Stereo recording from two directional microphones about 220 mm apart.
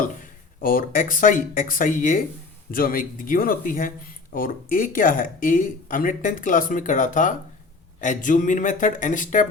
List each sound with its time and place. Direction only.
0.0 s speech: 40° left (ahead or behind)